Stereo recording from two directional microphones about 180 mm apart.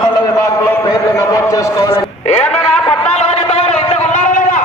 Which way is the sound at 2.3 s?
5° left (ahead or behind).